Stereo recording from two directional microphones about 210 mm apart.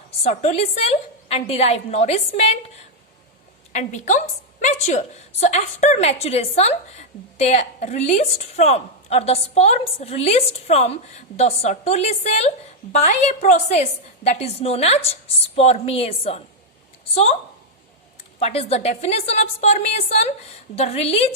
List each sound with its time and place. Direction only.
0.2 s a woman's voice: 30° left (ahead or behind)
3.7 s a woman's voice: 35° left (ahead or behind)
18.3 s a woman's voice: 30° left (ahead or behind)